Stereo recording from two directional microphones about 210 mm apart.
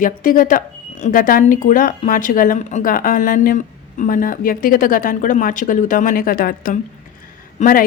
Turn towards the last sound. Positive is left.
turn(degrees=40)  # may be behind; listen again after turning